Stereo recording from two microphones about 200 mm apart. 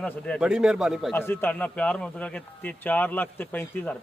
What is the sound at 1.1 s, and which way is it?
A man's voice, 10° left (ahead or behind).